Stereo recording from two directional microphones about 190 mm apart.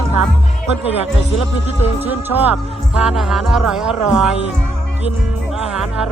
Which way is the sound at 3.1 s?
Centre (ahead or behind).